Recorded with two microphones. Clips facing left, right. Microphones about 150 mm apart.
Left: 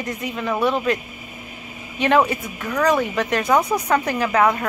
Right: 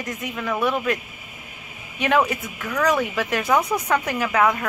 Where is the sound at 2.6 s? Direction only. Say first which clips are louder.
Left 2 dB; 10° left (ahead or behind).